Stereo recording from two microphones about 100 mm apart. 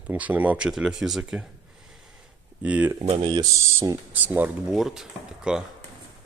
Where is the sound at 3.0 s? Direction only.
90° right.